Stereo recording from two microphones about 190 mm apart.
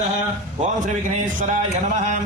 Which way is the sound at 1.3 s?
40° right (ahead or behind).